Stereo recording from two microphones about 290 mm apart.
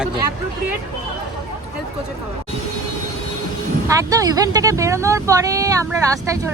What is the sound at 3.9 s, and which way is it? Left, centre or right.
Speech, centre.